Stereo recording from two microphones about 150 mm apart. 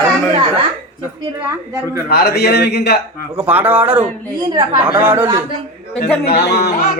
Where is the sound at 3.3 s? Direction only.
10° right (ahead or behind).